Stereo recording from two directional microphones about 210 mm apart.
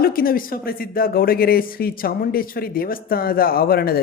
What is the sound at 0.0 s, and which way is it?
Speech, 45° left (ahead or behind).